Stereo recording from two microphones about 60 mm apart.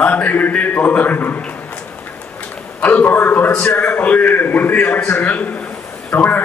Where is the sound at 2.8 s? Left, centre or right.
Left.